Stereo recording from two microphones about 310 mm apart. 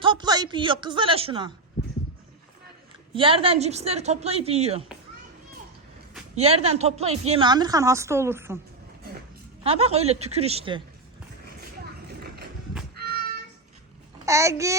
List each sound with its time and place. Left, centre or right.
0.0 s a woman's voice: centre
3.2 s a woman's voice: centre
6.3 s a woman's voice: centre
9.6 s a woman's voice: centre
14.3 s a woman's voice: centre